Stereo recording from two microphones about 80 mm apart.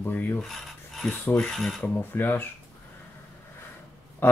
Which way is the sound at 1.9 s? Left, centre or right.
Left.